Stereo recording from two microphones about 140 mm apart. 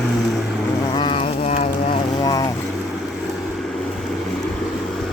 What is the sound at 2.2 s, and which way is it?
Vehicle, 25° left (ahead or behind).